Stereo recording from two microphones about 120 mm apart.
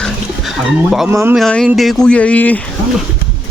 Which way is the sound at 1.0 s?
20° right (ahead or behind).